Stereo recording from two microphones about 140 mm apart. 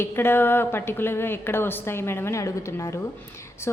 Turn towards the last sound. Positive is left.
turn(degrees=20)  # may be behind; listen again after turning